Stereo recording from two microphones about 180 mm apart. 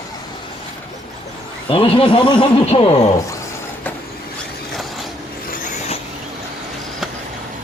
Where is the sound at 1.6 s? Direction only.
30° left (ahead or behind).